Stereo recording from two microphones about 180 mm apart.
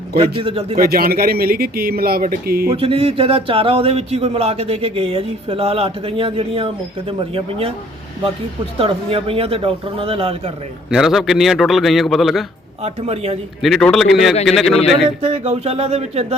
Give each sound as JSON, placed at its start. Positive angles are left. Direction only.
{"t": 0.2, "sound": "speech", "side_deg": -30}
{"t": 0.8, "sound": "a man's voice", "side_deg": -55}
{"t": 2.7, "sound": "speech", "side_deg": -30}
{"t": 8.8, "sound": "speech", "side_deg": -30}
{"t": 10.9, "sound": "a man's voice", "side_deg": 0}
{"t": 12.8, "sound": "speech", "side_deg": -35}
{"t": 13.6, "sound": "a man's voice", "side_deg": 0}
{"t": 15.2, "sound": "speech", "side_deg": -35}